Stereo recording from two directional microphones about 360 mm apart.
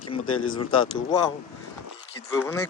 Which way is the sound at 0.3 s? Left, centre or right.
Left.